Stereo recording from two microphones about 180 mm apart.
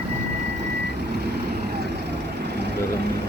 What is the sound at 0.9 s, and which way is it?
Vehicle, 65° right (ahead or behind).